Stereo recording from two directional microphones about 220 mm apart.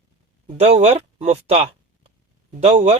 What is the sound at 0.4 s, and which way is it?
Speech, 30° right (ahead or behind).